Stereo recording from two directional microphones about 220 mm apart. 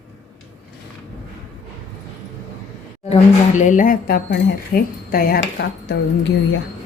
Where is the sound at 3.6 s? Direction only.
35° left (ahead or behind).